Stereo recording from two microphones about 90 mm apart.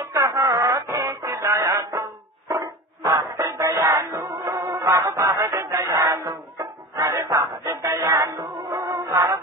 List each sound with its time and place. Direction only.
0.0 s music: 40° right (ahead or behind)
2.6 s dog: 35° right (ahead or behind)
3.2 s music: 35° right (ahead or behind)